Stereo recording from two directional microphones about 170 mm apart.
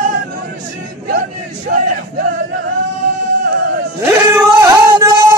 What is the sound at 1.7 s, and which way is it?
Crowd, 65° right (ahead or behind).